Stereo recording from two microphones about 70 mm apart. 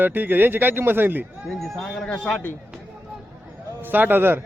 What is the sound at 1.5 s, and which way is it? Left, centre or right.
Speech, centre.